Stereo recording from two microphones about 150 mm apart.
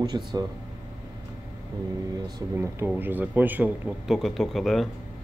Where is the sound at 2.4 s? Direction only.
15° right (ahead or behind); by 4.9 s centre (ahead or behind).